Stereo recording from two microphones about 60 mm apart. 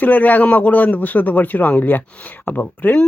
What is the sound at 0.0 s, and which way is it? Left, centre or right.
Speech, left.